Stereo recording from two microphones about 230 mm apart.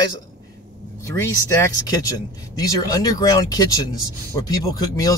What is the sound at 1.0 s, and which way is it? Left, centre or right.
Speech, centre.